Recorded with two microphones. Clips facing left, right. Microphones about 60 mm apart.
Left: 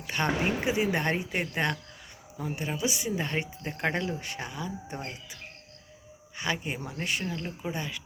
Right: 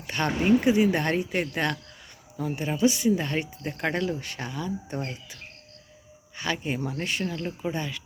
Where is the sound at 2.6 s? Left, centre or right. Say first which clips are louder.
Right 8 dB; centre.